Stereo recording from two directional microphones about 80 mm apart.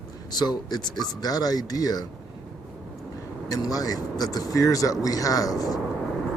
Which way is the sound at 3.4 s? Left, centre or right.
Left.